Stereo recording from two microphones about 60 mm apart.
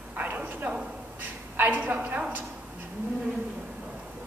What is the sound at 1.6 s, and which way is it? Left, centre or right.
Speech, right.